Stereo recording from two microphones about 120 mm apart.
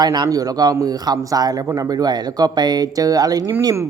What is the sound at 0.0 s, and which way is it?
A man's voice, 35° right (ahead or behind).